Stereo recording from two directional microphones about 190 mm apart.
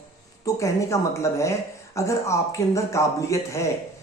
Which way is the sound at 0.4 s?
15° left (ahead or behind).